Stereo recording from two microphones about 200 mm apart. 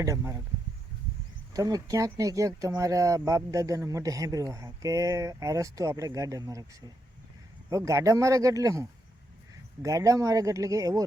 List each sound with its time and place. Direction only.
0.0 s speech: 15° right (ahead or behind)
1.5 s speech: 15° right (ahead or behind)